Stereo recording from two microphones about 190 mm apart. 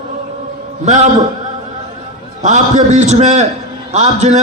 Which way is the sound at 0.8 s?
40° right (ahead or behind).